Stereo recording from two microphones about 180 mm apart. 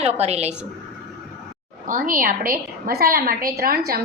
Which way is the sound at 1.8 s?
50° right (ahead or behind).